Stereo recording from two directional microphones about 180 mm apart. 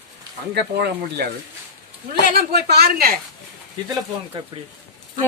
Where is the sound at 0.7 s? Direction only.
65° right (ahead or behind).